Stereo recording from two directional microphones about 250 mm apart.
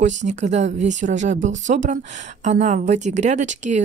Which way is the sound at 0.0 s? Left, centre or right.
Right.